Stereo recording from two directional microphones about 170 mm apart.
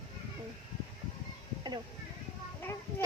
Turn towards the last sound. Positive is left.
turn(degrees=15)  # may be behind; listen again after turning